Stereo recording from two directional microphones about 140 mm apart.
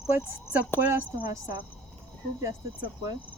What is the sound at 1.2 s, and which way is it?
Speech, 30° right (ahead or behind).